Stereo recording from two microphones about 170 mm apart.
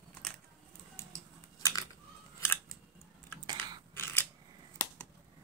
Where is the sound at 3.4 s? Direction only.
25° right (ahead or behind).